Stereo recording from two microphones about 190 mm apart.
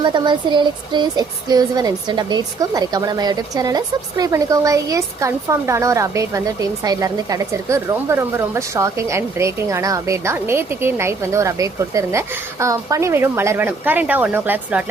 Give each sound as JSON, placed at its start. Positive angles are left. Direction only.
{"t": 0.0, "sound": "speech", "side_deg": -25}